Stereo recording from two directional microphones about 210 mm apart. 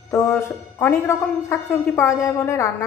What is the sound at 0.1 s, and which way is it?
A woman's voice, 15° left (ahead or behind).